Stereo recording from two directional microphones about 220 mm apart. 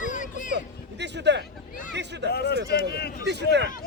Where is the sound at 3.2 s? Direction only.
50° right (ahead or behind).